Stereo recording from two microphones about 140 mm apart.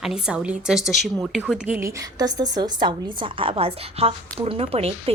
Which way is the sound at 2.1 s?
25° right (ahead or behind).